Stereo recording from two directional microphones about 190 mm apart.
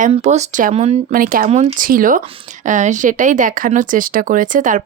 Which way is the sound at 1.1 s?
45° right (ahead or behind).